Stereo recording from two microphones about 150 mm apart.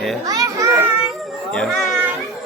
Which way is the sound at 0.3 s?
20° right (ahead or behind).